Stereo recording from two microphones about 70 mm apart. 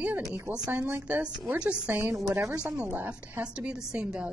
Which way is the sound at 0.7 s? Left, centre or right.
Right.